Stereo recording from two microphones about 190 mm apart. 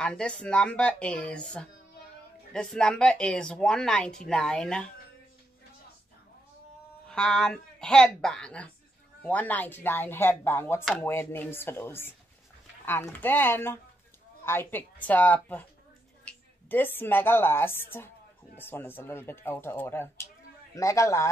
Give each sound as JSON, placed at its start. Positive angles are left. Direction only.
{"t": 0.0, "sound": "speech", "side_deg": 5}
{"t": 7.1, "sound": "speech", "side_deg": 5}